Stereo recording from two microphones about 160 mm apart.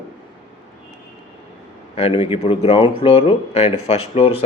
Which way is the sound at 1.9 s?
35° left (ahead or behind).